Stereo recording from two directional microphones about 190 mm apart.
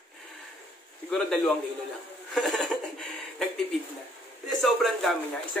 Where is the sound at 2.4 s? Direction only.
Centre (ahead or behind).